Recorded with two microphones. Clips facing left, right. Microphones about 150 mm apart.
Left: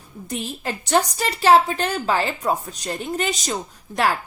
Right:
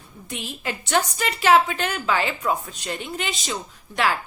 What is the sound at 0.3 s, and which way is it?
A woman's voice, 40° left (ahead or behind).